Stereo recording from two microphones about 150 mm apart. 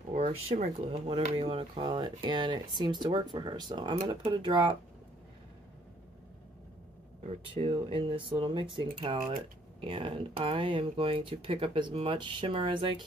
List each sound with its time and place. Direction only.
0.1 s speech: 50° right (ahead or behind); by 4.7 s 30° right (ahead or behind)
7.5 s speech: 35° right (ahead or behind)